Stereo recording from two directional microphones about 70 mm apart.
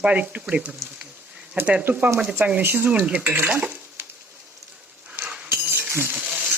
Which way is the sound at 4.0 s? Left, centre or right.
Right.